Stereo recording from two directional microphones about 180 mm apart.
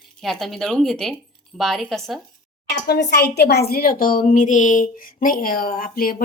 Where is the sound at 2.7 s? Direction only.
65° left (ahead or behind).